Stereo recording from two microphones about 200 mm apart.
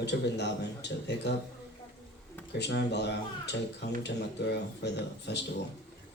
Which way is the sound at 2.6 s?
55° left (ahead or behind).